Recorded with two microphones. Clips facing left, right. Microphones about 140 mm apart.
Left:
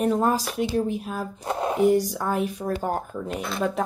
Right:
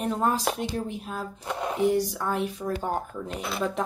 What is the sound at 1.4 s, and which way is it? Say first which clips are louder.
Speech: left 5 dB; 35° left (ahead or behind).